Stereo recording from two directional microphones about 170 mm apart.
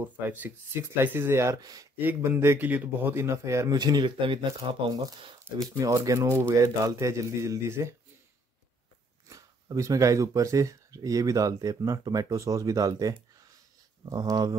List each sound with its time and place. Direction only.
0.0 s a man's voice: 10° right (ahead or behind)
9.3 s speech: 20° right (ahead or behind)